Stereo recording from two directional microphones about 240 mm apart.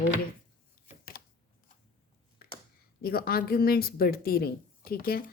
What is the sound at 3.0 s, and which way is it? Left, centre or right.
Speech, left.